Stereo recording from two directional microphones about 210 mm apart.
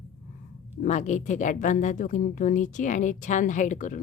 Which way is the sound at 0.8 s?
35° left (ahead or behind).